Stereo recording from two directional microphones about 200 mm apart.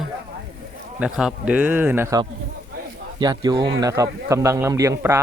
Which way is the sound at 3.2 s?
20° right (ahead or behind).